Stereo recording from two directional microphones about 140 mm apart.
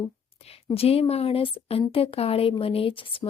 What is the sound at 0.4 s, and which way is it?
Speech, 45° left (ahead or behind).